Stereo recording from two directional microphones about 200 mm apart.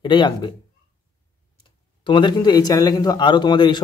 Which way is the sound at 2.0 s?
25° left (ahead or behind).